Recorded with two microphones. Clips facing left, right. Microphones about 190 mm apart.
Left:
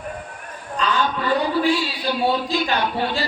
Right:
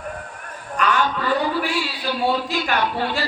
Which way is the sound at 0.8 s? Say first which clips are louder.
Right 1 dB; 20° left (ahead or behind).